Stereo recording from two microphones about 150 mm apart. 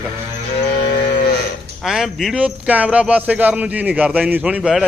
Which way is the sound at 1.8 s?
Centre (ahead or behind).